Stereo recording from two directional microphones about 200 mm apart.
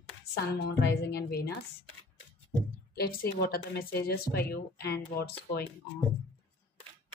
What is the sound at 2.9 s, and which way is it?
A woman's voice, 50° left (ahead or behind).